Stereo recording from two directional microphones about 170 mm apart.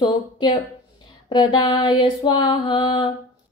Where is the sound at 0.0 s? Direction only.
25° left (ahead or behind).